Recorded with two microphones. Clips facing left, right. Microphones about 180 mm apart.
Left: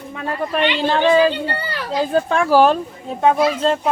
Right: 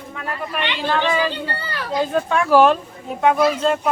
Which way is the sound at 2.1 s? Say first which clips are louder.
Left 1 dB; 35° left (ahead or behind).